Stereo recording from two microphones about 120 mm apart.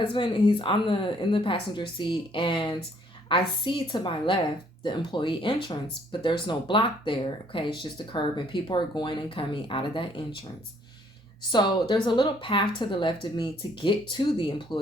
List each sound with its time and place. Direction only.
0.1 s speech: 45° left (ahead or behind)
11.5 s speech: 40° left (ahead or behind)